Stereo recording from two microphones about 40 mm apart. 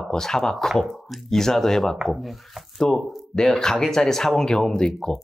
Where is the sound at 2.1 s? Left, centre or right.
Centre.